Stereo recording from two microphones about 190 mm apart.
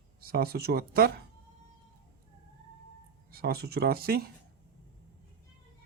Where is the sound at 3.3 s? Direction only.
55° right (ahead or behind).